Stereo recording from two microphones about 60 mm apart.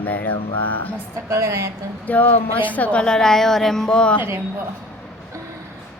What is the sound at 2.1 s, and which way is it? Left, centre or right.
A woman's voice, left.